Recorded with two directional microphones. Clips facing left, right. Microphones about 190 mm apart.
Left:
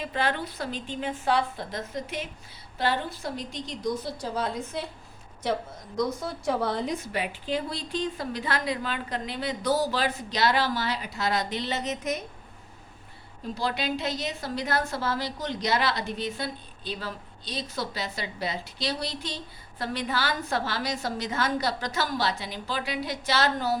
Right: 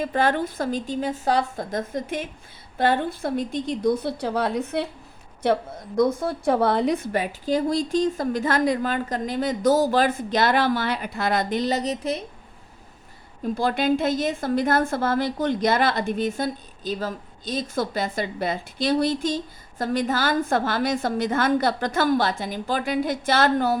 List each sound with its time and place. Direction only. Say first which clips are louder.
0.0 s a woman's voice: right 7 dB; 45° right (ahead or behind)
13.4 s a woman's voice: right 7 dB; 50° right (ahead or behind)